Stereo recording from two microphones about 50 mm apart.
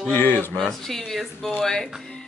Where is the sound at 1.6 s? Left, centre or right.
Centre.